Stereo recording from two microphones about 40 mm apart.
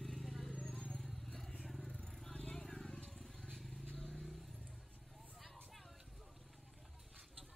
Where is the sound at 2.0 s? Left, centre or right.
Centre.